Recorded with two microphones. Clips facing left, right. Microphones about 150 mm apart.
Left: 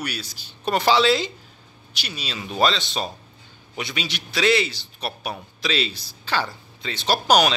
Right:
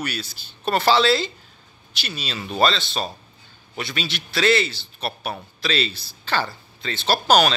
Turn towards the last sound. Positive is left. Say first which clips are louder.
# right 1 dB
turn(degrees=15)  # may be behind; listen again after turning